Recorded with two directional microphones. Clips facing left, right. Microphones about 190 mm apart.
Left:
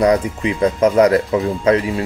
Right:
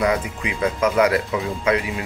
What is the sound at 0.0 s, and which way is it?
Speech, 35° left (ahead or behind).